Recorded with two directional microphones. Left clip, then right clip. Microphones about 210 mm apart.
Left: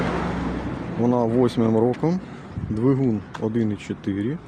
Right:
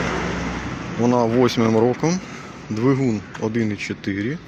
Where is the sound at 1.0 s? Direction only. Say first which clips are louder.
Right 3 dB; 10° left (ahead or behind).